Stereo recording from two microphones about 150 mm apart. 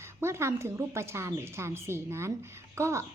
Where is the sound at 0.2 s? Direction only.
15° right (ahead or behind).